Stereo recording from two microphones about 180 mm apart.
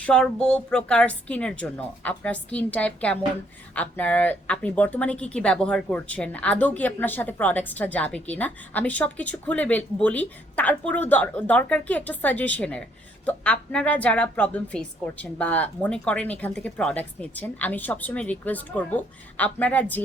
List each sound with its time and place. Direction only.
0.0 s speech: 5° left (ahead or behind)